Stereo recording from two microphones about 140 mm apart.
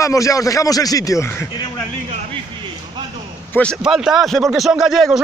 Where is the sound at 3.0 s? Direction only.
30° right (ahead or behind).